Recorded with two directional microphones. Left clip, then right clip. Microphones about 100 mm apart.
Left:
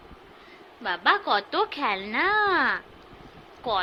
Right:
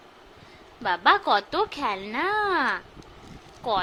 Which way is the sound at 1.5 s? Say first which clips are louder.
Left 1 dB; 25° right (ahead or behind).